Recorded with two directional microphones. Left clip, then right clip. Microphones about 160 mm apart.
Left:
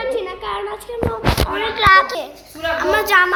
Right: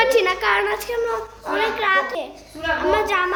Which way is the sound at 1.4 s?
10° left (ahead or behind).